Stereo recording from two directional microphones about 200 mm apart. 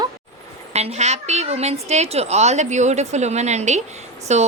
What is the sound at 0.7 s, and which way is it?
A woman's voice, 35° right (ahead or behind).